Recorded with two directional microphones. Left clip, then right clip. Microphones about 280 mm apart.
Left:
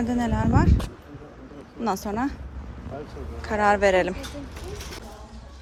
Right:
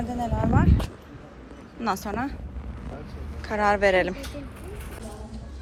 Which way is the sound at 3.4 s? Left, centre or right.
Centre.